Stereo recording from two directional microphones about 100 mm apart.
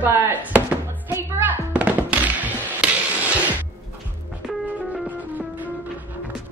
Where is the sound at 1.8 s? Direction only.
15° right (ahead or behind).